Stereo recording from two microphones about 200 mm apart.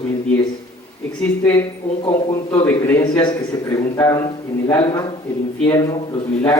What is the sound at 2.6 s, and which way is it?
A man's voice, 10° left (ahead or behind).